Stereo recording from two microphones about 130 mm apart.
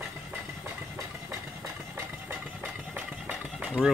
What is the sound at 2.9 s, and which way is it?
Engine, 10° right (ahead or behind).